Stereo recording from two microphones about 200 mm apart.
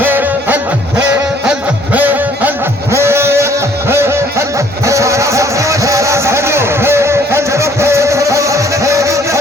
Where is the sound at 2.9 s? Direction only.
10° right (ahead or behind).